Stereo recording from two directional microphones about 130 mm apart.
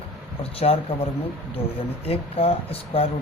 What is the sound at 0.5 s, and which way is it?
Speech, 50° left (ahead or behind).